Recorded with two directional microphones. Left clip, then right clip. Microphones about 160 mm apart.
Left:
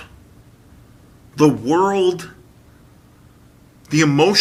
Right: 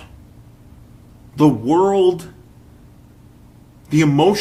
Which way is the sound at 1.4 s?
5° left (ahead or behind).